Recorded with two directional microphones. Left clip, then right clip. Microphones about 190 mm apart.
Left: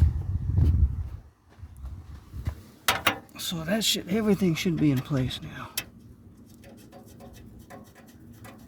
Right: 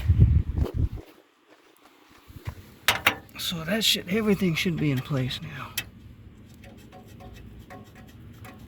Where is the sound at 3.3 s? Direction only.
25° left (ahead or behind).